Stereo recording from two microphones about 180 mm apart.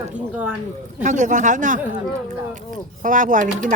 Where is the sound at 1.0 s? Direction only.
40° right (ahead or behind).